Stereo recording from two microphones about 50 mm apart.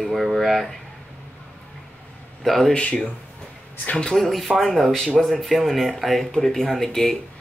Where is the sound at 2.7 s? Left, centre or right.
Left.